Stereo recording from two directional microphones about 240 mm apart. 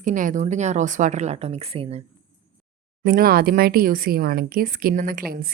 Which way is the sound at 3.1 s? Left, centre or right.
Right.